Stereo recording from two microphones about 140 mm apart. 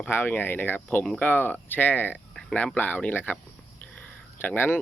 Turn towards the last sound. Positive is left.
turn(degrees=15)  # may be behind; listen again after turning